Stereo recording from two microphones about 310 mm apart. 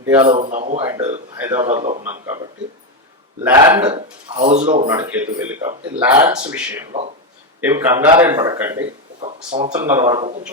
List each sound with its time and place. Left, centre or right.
0.1 s speech: centre
1.6 s speech: right
3.4 s speech: centre
4.4 s speech: right
6.9 s speech: centre
7.6 s speech: centre
9.2 s speech: right
9.8 s speech: centre